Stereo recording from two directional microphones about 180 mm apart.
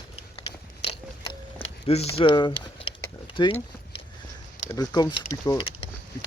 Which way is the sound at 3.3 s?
30° left (ahead or behind).